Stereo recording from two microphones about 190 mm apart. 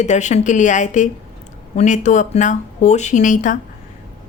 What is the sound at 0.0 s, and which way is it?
A woman's voice, 40° left (ahead or behind).